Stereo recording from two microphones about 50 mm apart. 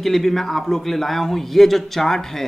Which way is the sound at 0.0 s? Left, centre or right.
Centre.